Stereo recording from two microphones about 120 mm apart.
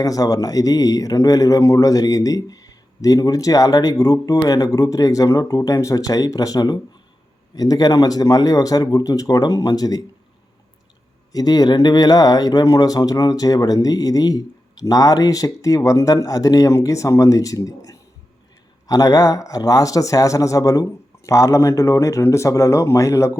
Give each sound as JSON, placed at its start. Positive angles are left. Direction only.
{"t": 0.0, "sound": "a man's voice", "side_deg": 30}
{"t": 11.3, "sound": "a man's voice", "side_deg": 30}